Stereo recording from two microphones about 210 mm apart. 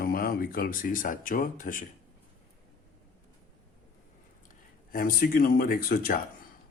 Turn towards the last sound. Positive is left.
turn(degrees=45)  # may be behind; listen again after turning